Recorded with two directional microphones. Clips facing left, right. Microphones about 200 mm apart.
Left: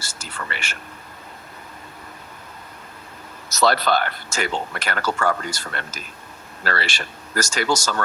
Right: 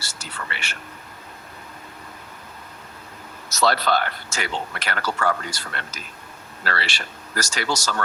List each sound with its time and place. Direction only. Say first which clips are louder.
0.0 s whispering: left 1 dB; 50° left (ahead or behind)
3.6 s speech: left 2 dB; 50° left (ahead or behind)